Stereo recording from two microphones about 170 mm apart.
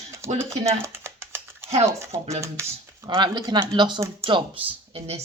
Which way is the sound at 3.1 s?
25° right (ahead or behind).